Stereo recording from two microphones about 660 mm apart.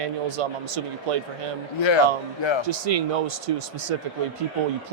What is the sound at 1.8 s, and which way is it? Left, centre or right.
Speech, left.